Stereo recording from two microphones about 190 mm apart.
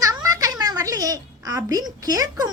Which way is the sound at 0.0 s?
20° right (ahead or behind).